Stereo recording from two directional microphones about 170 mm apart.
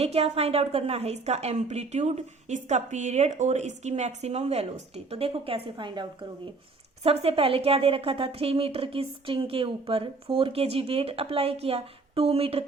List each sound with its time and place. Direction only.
0.0 s a woman's voice: 35° right (ahead or behind)